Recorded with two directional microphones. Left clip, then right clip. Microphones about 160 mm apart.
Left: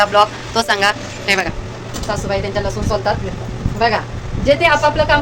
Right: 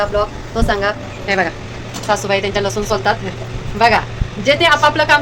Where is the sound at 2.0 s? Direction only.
45° right (ahead or behind).